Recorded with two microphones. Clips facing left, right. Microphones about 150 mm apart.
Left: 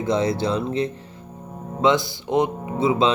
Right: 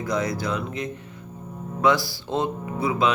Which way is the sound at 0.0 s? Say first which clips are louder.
Left 5 dB; 25° left (ahead or behind).